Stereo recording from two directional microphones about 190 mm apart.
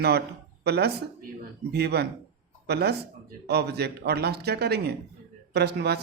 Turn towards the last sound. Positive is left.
turn(degrees=-60)  # may be behind; listen again after turning